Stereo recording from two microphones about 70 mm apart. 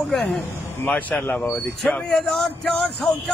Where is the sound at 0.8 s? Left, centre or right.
Left.